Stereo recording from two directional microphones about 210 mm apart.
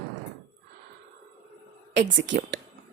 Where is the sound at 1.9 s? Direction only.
55° right (ahead or behind).